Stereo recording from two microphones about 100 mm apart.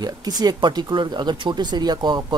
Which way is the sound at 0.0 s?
40° right (ahead or behind).